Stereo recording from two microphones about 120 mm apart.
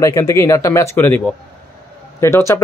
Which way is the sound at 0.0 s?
25° left (ahead or behind).